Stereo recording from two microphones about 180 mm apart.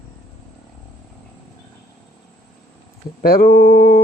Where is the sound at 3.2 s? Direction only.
55° left (ahead or behind).